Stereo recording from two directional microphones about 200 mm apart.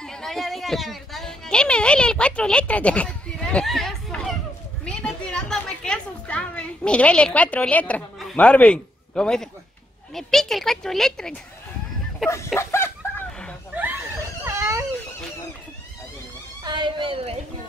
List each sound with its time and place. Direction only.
0.0 s a woman's voice: centre (ahead or behind)
12.5 s chicken: 10° left (ahead or behind)
13.7 s screaming: 10° right (ahead or behind)
16.6 s a sound: 25° right (ahead or behind)